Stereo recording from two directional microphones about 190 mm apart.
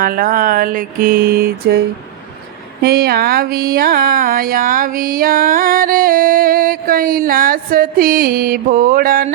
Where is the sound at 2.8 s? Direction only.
55° right (ahead or behind).